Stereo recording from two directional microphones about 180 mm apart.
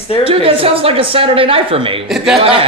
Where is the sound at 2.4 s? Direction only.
30° right (ahead or behind).